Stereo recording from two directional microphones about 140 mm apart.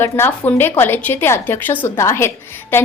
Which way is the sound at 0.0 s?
15° left (ahead or behind).